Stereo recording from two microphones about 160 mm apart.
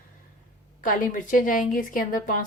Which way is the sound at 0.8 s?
55° left (ahead or behind).